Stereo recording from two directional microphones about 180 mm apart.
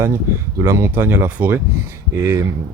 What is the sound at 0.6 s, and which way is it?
Speech, 15° right (ahead or behind).